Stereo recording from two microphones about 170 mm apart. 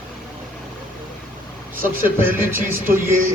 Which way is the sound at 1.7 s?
55° right (ahead or behind).